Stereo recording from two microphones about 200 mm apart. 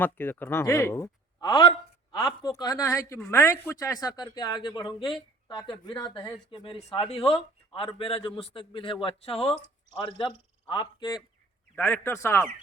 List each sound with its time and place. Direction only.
0.0 s a man's voice: 10° left (ahead or behind)
11.7 s speech: 10° left (ahead or behind)